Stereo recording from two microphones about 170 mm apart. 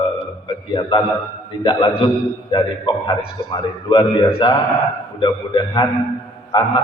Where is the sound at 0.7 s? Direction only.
25° left (ahead or behind).